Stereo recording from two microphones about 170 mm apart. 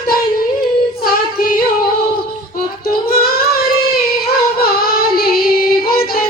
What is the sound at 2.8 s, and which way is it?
Child singing, 65° left (ahead or behind).